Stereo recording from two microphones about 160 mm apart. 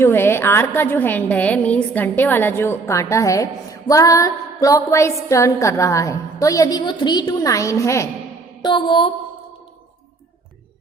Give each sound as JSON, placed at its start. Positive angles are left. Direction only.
{"t": 0.0, "sound": "a woman's voice", "side_deg": 15}
{"t": 8.6, "sound": "music", "side_deg": 30}